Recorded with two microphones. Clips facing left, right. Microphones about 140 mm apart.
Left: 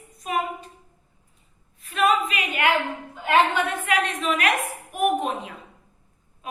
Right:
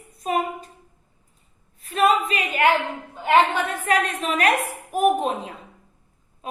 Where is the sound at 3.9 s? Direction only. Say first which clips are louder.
Right 1 dB; 35° right (ahead or behind).